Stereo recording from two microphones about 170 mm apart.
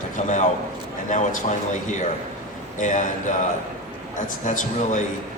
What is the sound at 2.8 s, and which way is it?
Speech, 50° left (ahead or behind).